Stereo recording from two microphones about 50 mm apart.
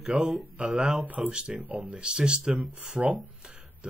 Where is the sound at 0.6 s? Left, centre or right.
Centre.